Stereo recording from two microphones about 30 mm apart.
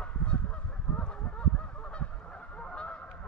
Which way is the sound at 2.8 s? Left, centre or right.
Left.